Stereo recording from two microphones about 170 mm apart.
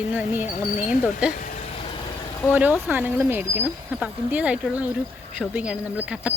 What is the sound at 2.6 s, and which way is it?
Speech, 10° right (ahead or behind).